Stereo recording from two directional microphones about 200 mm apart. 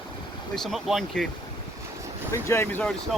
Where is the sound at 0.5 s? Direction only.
Centre (ahead or behind).